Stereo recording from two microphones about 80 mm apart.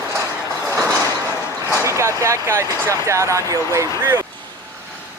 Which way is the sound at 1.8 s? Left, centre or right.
Right.